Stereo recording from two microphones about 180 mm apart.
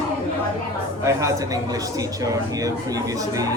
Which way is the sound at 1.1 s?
20° right (ahead or behind).